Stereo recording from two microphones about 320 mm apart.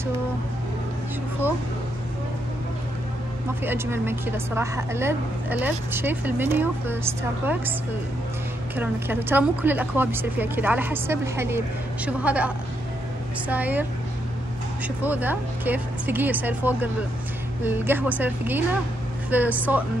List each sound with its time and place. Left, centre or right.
3.6 s a woman's voice: centre
8.7 s a woman's voice: centre
15.0 s a woman's voice: centre